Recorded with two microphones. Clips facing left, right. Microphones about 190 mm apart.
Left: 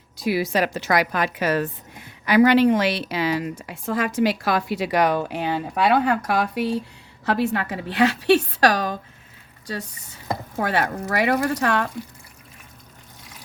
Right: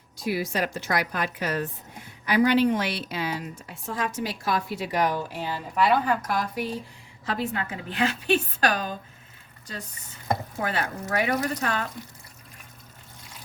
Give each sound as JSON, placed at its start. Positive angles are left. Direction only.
{"t": 0.2, "sound": "a woman's voice", "side_deg": 80}
{"t": 10.6, "sound": "a woman's voice", "side_deg": 70}